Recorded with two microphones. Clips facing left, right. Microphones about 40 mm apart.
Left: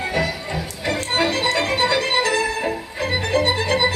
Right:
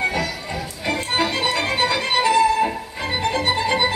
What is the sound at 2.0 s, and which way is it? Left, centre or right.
Music, centre.